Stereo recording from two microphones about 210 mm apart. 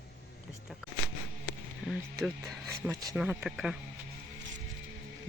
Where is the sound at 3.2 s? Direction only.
5° right (ahead or behind).